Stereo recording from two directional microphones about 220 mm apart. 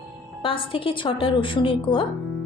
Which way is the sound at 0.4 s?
25° left (ahead or behind).